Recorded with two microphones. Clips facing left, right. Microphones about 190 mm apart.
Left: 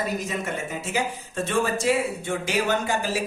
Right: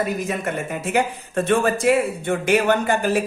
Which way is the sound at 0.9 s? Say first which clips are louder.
Right 7 dB; 60° right (ahead or behind).